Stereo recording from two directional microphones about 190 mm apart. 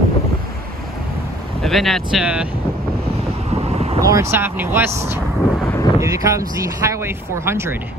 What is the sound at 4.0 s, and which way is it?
Speech, 15° right (ahead or behind).